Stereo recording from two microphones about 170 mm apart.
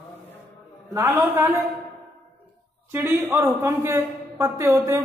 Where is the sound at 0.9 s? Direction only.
15° right (ahead or behind).